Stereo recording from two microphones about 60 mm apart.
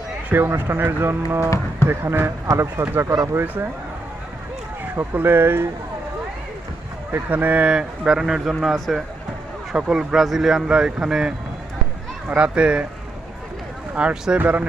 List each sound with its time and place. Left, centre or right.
0.3 s speech: right
4.9 s speech: right
7.1 s speech: right
13.9 s speech: centre
14.3 s speech: right